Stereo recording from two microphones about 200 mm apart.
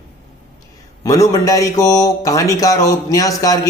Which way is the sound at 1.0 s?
15° left (ahead or behind).